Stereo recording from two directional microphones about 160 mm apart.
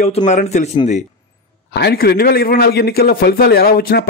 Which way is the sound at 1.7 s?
80° left.